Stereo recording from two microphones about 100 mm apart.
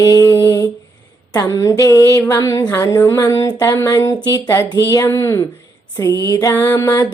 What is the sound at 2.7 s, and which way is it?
Speech, 30° left (ahead or behind).